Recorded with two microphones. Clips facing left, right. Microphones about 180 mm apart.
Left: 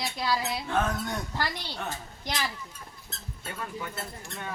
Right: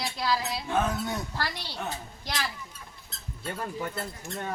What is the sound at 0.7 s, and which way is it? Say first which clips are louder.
Speech: right 2 dB; 10° right (ahead or behind).